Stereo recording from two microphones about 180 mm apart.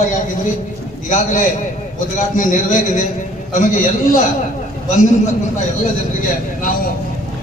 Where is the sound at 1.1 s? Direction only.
45° left (ahead or behind).